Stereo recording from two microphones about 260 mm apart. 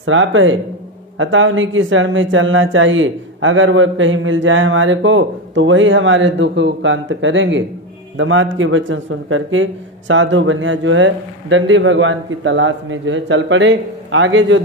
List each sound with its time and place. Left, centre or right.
0.0 s speech: right